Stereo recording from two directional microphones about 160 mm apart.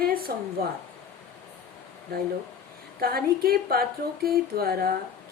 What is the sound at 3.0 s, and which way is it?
A woman's voice, 70° right (ahead or behind).